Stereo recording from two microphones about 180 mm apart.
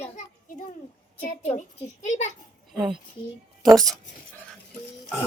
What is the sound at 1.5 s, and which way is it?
Speech, 45° left (ahead or behind).